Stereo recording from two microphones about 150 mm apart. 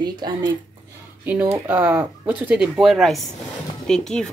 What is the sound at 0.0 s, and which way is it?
Speech, 30° right (ahead or behind).